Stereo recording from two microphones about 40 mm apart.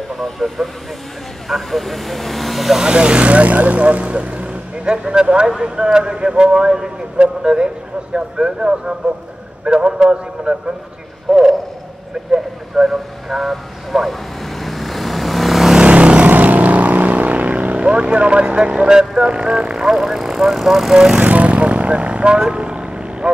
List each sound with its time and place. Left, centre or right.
0.2 s speech: centre
2.8 s speech: right
11.3 s speech: centre
12.7 s vehicle: centre
15.8 s vehicle: right
16.3 s vehicle: right; by 19.2 s centre
19.2 s speech: right
21.2 s speech: right